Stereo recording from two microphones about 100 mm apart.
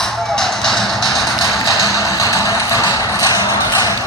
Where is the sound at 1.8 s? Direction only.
35° left (ahead or behind).